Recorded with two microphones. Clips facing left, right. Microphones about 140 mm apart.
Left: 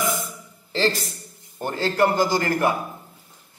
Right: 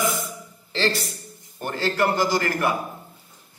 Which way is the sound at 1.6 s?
25° left (ahead or behind).